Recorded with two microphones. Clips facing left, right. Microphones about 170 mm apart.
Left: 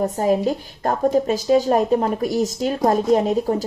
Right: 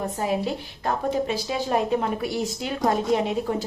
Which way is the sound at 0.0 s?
40° left (ahead or behind).